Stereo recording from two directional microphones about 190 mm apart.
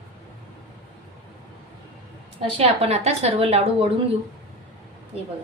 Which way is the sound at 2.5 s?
35° right (ahead or behind).